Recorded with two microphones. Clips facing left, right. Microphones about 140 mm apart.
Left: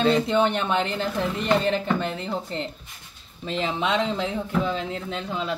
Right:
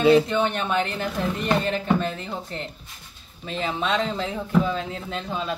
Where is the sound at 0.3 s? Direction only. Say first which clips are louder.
Left 2 dB; 20° left (ahead or behind).